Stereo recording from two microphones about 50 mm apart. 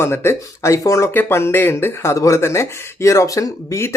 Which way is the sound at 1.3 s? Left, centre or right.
Left.